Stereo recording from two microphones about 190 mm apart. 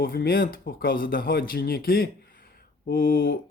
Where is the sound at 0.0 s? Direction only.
55° left (ahead or behind).